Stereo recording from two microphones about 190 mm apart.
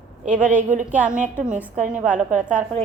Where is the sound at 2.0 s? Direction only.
40° right (ahead or behind).